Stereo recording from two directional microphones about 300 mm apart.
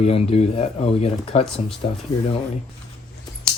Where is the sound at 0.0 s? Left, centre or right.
Left.